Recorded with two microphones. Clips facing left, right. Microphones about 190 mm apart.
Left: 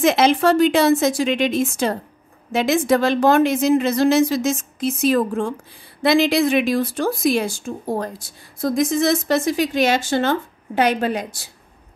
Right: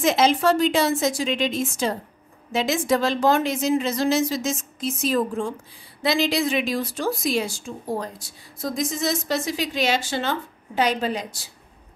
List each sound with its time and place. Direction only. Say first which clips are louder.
0.0 s speech: left 3 dB; 65° left (ahead or behind)